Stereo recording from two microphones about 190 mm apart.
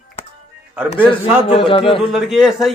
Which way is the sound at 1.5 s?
30° left (ahead or behind).